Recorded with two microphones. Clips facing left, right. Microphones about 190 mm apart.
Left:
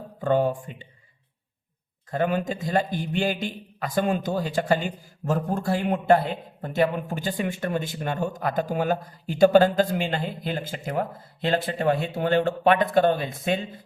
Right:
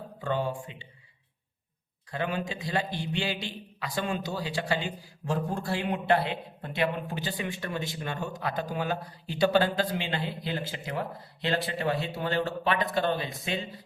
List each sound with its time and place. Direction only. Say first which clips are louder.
0.2 s a man's voice: left 8 dB; 50° left (ahead or behind)
2.0 s a man's voice: left 7 dB; 45° left (ahead or behind)